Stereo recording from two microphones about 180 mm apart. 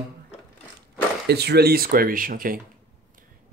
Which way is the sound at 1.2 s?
65° right (ahead or behind).